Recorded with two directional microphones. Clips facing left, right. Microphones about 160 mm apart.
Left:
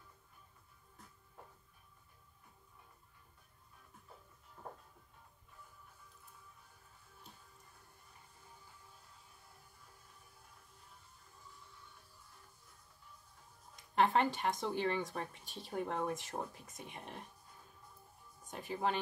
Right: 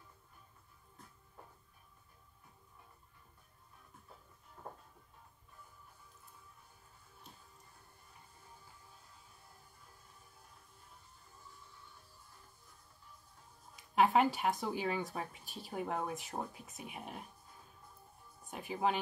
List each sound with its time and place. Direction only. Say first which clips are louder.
13.9 s speech: right 2 dB; 5° right (ahead or behind)
18.5 s speech: right 2 dB; 10° right (ahead or behind)